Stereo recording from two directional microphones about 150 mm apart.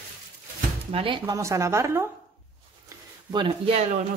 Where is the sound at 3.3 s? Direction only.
35° right (ahead or behind).